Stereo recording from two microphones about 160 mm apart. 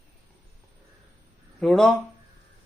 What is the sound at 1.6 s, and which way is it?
Speech, 5° left (ahead or behind).